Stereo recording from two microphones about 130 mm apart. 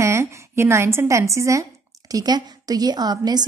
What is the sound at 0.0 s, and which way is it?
A woman's voice, 20° right (ahead or behind).